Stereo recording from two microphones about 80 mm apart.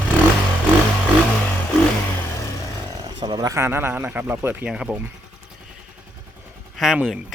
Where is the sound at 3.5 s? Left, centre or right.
Right.